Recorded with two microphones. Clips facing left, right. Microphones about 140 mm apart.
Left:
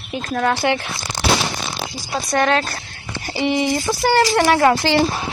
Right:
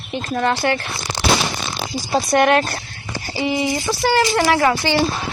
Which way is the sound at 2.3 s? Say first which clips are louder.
Right 2 dB; 20° right (ahead or behind).